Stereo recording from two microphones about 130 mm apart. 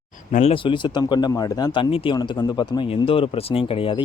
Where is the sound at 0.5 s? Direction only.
40° left (ahead or behind).